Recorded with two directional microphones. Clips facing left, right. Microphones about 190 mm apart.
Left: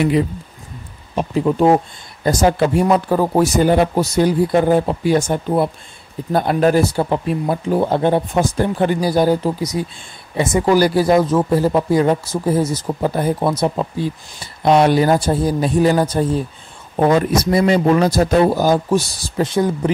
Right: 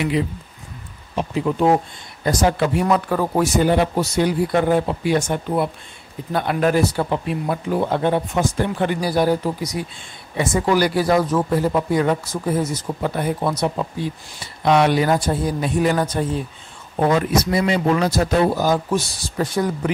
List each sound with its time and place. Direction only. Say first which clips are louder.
1.4 s speech: left 4 dB; 35° left (ahead or behind)
9.0 s speech: left 2 dB; 25° left (ahead or behind)
10.6 s speech: left 5 dB; 35° left (ahead or behind)
11.1 s speech: left 4 dB; 20° left (ahead or behind)
11.5 s speech: left 4 dB; 35° left (ahead or behind)